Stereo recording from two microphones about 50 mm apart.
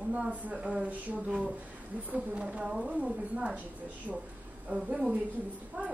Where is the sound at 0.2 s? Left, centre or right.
Right.